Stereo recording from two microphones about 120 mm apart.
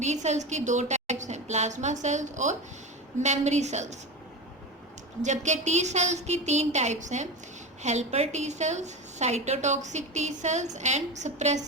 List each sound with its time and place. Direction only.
0.0 s a woman's voice: 75° right (ahead or behind); by 2.6 s 90° right
3.2 s a woman's voice: 70° right (ahead or behind)
5.2 s a woman's voice: 80° right